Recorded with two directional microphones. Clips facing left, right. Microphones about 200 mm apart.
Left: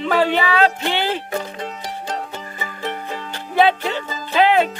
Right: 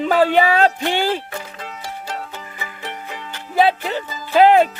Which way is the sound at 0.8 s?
45° right (ahead or behind).